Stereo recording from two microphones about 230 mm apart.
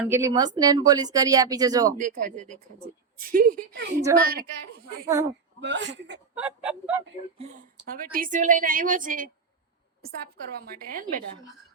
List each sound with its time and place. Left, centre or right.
0.1 s speech: centre
2.0 s a woman's voice: right
5.0 s speech: centre
5.5 s speech: right
6.3 s speech: centre
7.3 s a woman's voice: right
10.6 s a woman's voice: right